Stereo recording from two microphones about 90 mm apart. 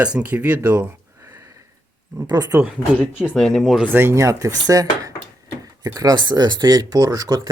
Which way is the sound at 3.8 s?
25° right (ahead or behind).